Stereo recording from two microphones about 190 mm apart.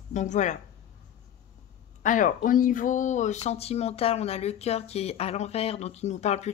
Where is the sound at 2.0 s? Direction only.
45° left (ahead or behind).